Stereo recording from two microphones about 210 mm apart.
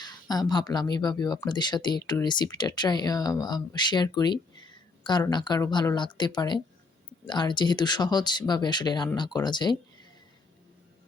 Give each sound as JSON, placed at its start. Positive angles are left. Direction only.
{"t": 0.0, "sound": "speech", "side_deg": 20}